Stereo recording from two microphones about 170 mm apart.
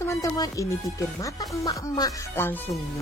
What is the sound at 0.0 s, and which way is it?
Speech, 20° left (ahead or behind).